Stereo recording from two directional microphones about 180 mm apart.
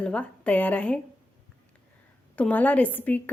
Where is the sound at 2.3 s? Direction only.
10° left (ahead or behind).